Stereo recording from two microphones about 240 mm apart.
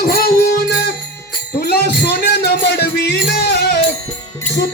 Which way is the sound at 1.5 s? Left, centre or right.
Left.